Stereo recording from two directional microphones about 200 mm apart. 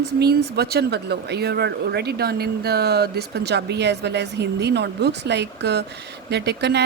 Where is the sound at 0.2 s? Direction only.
55° right (ahead or behind).